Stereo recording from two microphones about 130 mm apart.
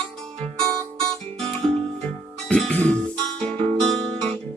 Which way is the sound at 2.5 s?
10° left (ahead or behind).